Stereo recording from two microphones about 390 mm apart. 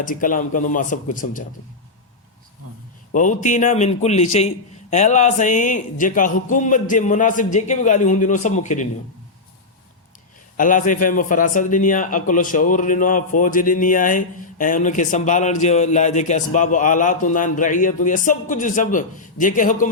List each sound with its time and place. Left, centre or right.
0.0 s a man's voice: left
3.1 s a man's voice: centre
10.6 s a man's voice: centre